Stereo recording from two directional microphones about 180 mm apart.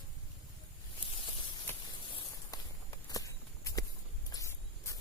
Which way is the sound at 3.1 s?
20° left (ahead or behind).